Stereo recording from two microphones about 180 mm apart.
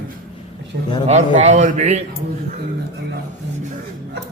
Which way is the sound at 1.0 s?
40° right (ahead or behind).